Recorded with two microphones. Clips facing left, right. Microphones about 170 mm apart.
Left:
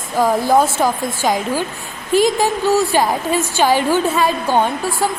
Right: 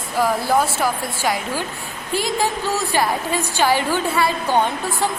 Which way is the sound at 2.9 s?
15° left (ahead or behind).